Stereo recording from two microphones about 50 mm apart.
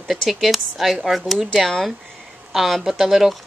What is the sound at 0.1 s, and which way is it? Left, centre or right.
Speech, centre.